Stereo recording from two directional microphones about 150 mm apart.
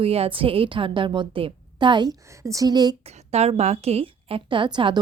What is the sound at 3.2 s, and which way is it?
Speech, 45° right (ahead or behind).